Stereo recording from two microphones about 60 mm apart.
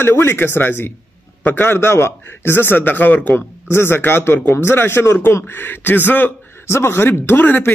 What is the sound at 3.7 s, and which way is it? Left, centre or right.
A man's voice, left.